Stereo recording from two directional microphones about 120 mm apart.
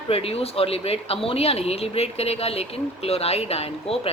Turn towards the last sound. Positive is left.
turn(degrees=55)  # may be behind; listen again after turning